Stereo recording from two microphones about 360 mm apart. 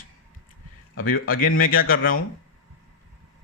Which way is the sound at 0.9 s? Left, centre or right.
Left.